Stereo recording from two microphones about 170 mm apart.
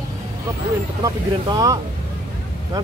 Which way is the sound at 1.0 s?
20° right (ahead or behind).